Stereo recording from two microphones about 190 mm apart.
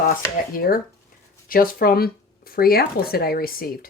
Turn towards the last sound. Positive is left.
turn(degrees=50)  # may be behind; listen again after turning